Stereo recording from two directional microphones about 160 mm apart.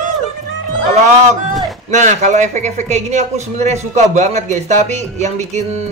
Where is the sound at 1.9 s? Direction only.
45° right (ahead or behind).